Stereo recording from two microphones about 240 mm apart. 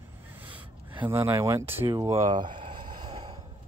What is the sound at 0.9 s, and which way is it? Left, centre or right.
Speech, centre.